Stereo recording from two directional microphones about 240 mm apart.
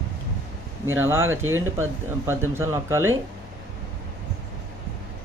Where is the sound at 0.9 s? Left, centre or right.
Centre.